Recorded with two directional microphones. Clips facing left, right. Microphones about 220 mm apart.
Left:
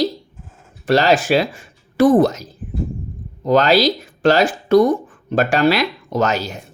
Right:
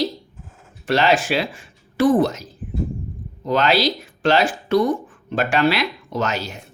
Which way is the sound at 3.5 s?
40° left (ahead or behind).